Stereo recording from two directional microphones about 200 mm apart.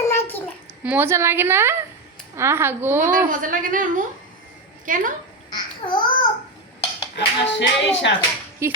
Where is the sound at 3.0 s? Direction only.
40° right (ahead or behind).